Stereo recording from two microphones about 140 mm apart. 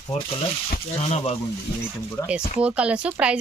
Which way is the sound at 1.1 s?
45° left (ahead or behind).